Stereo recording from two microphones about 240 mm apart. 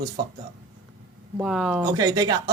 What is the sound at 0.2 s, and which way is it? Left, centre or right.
Speech, centre.